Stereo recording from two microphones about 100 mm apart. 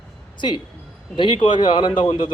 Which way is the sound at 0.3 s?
50° left (ahead or behind).